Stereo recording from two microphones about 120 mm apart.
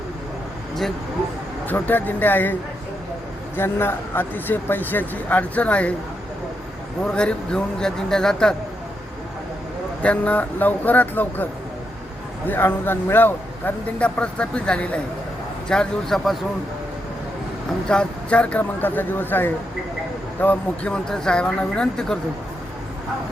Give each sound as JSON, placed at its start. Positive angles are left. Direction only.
{"t": 1.6, "sound": "a man's voice", "side_deg": 15}
{"t": 7.0, "sound": "speech", "side_deg": 10}
{"t": 10.0, "sound": "a man's voice", "side_deg": 10}
{"t": 12.5, "sound": "a man's voice", "side_deg": 15}
{"t": 17.8, "sound": "a man's voice", "side_deg": 10}